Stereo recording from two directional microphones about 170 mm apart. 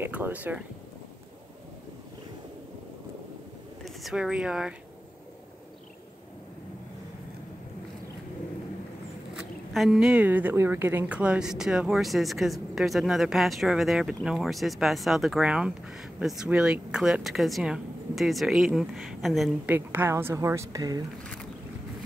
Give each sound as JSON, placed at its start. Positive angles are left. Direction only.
{"t": 0.0, "sound": "a woman's voice", "side_deg": -10}
{"t": 3.8, "sound": "speech", "side_deg": 0}
{"t": 9.3, "sound": "speech", "side_deg": -5}
{"t": 19.7, "sound": "a woman's voice", "side_deg": -15}